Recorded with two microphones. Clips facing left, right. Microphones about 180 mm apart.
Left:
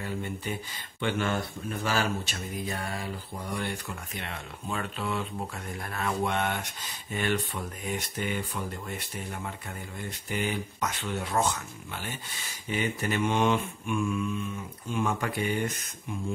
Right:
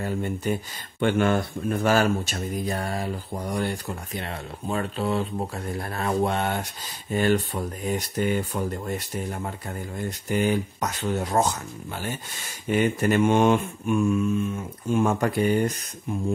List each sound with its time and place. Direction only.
0.0 s speech: 45° right (ahead or behind)
12.6 s mantra: 50° right (ahead or behind)
14.9 s speech: 45° right (ahead or behind)